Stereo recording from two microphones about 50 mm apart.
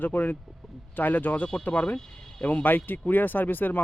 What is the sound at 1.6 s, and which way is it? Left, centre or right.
Speech, left.